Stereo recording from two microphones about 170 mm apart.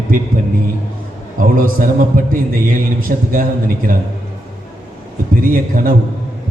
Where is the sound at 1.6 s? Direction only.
55° right (ahead or behind).